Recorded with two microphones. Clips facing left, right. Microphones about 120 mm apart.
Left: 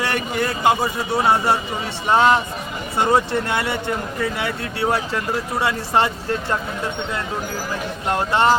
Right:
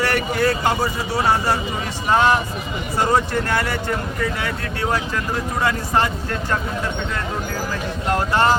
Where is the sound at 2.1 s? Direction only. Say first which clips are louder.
Left 1 dB; 25° left (ahead or behind).